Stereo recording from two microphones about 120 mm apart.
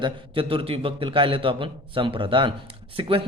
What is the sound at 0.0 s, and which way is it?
A man's voice, 50° right (ahead or behind).